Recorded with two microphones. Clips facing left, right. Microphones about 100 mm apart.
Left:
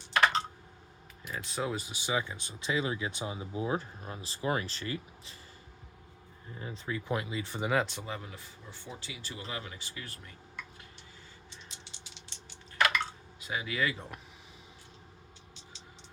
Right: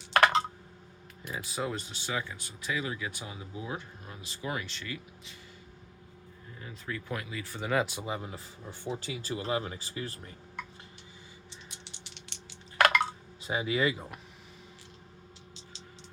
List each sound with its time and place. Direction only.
0.1 s computer keyboard: 60° right (ahead or behind)
1.3 s speech: 5° right (ahead or behind); by 5.3 s 35° left (ahead or behind)
6.6 s speech: 20° left (ahead or behind)
7.7 s speech: centre (ahead or behind)
7.9 s speech: 15° right (ahead or behind)
9.0 s speech: 45° right (ahead or behind)
9.5 s speech: 35° right (ahead or behind)
11.7 s drip: 60° right (ahead or behind)
13.4 s speech: 25° right (ahead or behind)
13.9 s speech: 5° right (ahead or behind)